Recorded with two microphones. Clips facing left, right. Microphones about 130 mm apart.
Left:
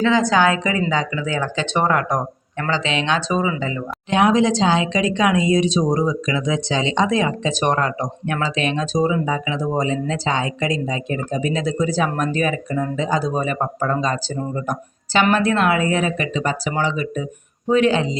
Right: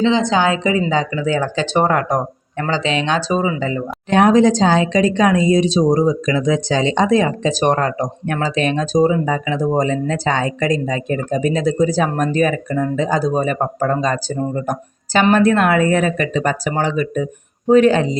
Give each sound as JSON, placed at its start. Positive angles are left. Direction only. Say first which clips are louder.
{"t": 0.0, "sound": "a woman's voice", "louder": "right 1 dB", "side_deg": -25}